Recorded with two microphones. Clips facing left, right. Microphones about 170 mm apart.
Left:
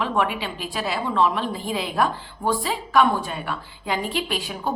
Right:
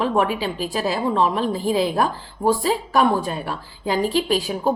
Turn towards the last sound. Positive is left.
turn(degrees=-40)  # may be behind; listen again after turning